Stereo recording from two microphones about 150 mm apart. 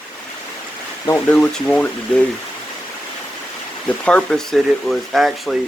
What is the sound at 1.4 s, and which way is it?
Speech, 5° left (ahead or behind).